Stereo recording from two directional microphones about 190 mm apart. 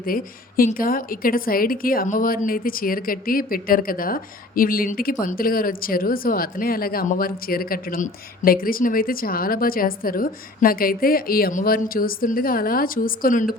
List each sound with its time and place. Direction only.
0.0 s speech: 50° left (ahead or behind)